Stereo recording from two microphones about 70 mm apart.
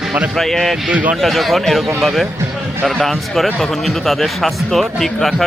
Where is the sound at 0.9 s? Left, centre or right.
Right.